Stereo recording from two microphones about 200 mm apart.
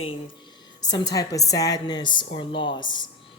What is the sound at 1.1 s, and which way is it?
A woman's voice, 15° left (ahead or behind).